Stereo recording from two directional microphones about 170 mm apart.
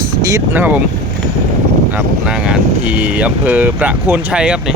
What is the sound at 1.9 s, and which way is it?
Speech, 10° right (ahead or behind).